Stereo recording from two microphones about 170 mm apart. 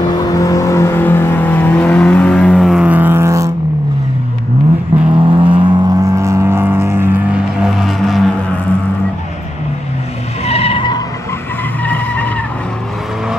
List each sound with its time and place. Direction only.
0.0 s vehicle: 20° left (ahead or behind); by 3.5 s 20° right (ahead or behind)
5.1 s vehicle: 30° right (ahead or behind); by 7.1 s 15° right (ahead or behind)
7.6 s vehicle: centre (ahead or behind)
10.4 s skidding: 35° left (ahead or behind)
11.8 s vehicle: 10° left (ahead or behind)